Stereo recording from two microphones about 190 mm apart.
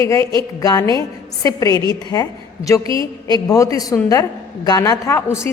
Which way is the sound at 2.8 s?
25° right (ahead or behind).